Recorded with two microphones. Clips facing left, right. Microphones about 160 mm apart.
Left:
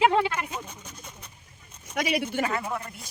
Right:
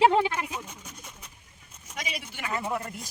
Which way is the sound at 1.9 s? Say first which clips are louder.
Left 11 dB; 70° left (ahead or behind).